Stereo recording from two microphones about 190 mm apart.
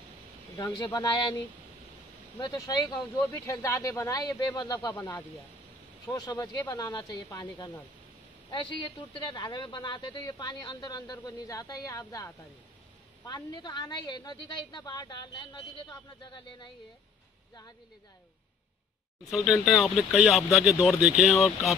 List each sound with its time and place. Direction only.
0.6 s speech: 20° left (ahead or behind)
2.3 s speech: 20° left (ahead or behind)
19.3 s speech: centre (ahead or behind)